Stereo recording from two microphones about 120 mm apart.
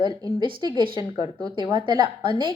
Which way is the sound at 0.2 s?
35° right (ahead or behind).